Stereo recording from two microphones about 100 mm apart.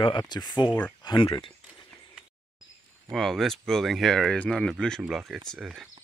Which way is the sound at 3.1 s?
Centre (ahead or behind).